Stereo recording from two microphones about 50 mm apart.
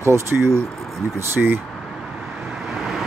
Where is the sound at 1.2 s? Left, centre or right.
Right.